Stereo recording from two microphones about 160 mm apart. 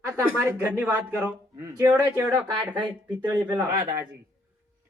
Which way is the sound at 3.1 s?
25° right (ahead or behind).